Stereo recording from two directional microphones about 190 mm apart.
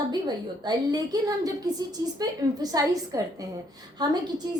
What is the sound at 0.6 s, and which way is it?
A woman's voice, 20° right (ahead or behind).